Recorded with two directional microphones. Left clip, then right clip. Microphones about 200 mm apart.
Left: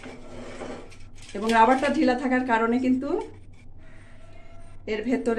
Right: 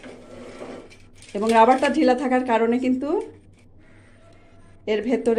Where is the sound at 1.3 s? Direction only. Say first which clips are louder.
Right 3 dB; 35° right (ahead or behind).